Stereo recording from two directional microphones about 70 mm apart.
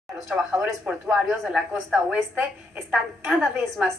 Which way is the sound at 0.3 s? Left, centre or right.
Centre.